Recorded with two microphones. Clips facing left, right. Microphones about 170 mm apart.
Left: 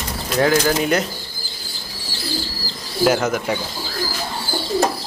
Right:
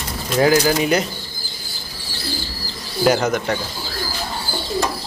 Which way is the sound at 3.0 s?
5° left (ahead or behind).